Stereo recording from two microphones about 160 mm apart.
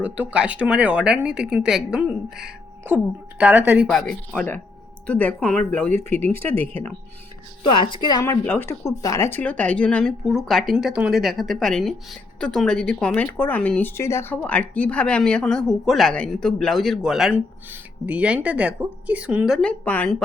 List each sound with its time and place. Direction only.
0.0 s speech: 10° right (ahead or behind)
3.8 s speech: 5° left (ahead or behind)
7.9 s speech: 25° left (ahead or behind); by 19.5 s 10° right (ahead or behind)
19.6 s speech: 10° left (ahead or behind)